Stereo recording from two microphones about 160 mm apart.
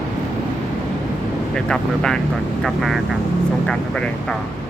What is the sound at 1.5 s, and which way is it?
Speech, 5° left (ahead or behind).